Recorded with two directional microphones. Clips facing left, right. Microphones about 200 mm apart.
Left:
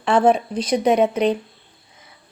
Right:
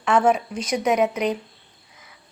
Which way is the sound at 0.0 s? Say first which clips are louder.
Left 3 dB; 30° left (ahead or behind).